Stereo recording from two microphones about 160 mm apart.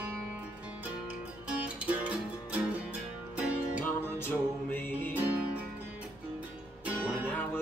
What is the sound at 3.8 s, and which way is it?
Music, 15° left (ahead or behind).